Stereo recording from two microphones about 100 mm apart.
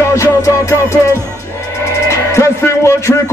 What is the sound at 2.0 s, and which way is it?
Music, 30° left (ahead or behind).